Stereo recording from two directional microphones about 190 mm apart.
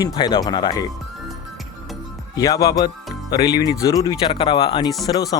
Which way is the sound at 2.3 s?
20° left (ahead or behind).